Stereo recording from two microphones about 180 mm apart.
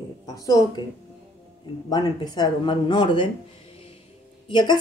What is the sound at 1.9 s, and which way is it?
Speech, 25° left (ahead or behind).